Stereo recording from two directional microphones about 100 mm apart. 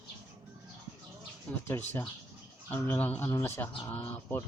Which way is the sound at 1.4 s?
20° left (ahead or behind).